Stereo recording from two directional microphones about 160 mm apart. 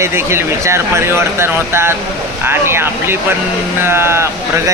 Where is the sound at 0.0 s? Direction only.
15° right (ahead or behind).